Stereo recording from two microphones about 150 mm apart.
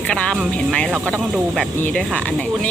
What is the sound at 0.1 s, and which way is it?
Speech, 5° left (ahead or behind).